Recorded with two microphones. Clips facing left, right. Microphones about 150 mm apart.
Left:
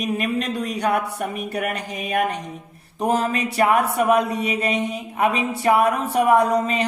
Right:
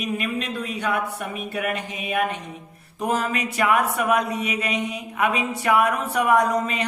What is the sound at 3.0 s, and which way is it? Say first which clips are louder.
Speech: left 3 dB; 35° left (ahead or behind).